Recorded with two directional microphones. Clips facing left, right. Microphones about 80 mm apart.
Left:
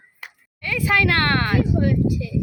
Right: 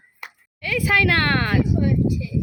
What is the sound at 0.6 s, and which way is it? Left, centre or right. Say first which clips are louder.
Speech: even; centre.